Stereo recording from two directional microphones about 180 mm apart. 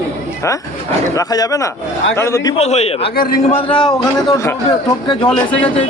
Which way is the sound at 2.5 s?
35° left (ahead or behind).